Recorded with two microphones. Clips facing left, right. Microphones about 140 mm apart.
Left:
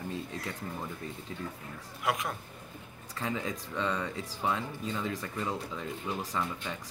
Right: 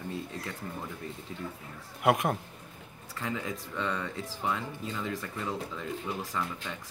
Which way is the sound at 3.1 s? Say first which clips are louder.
Left 1 dB; 15° left (ahead or behind).